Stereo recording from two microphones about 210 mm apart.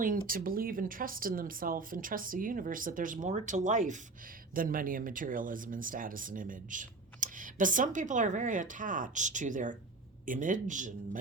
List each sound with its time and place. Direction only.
0.0 s speech: 40° right (ahead or behind)